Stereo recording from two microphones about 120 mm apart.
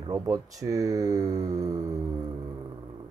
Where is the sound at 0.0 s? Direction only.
35° right (ahead or behind).